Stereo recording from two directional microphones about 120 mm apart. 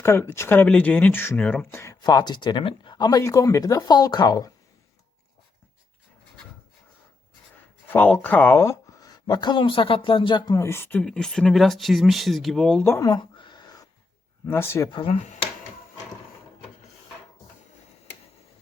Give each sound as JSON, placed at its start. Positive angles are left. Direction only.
{"t": 0.0, "sound": "speech", "side_deg": 20}
{"t": 2.0, "sound": "speech", "side_deg": 35}
{"t": 7.9, "sound": "speech", "side_deg": 15}
{"t": 10.5, "sound": "speech", "side_deg": 25}
{"t": 11.0, "sound": "speech", "side_deg": 5}
{"t": 12.8, "sound": "speech", "side_deg": 20}
{"t": 13.1, "sound": "a sound", "side_deg": 40}
{"t": 14.4, "sound": "speech", "side_deg": 20}
{"t": 14.8, "sound": "speech", "side_deg": 45}